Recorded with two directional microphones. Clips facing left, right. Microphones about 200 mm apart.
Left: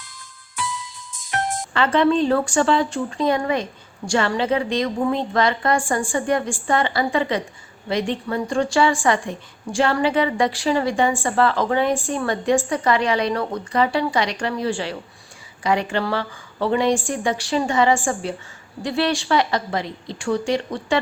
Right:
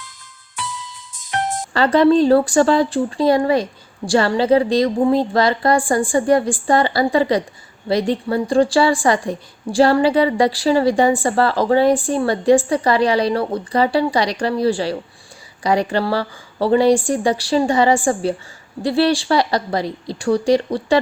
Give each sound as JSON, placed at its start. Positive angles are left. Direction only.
{"t": 1.7, "sound": "speech", "side_deg": -35}